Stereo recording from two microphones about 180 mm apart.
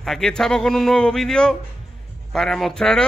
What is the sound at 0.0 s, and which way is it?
Speech, centre (ahead or behind).